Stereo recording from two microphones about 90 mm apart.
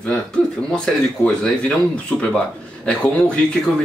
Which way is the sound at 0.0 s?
10° left (ahead or behind).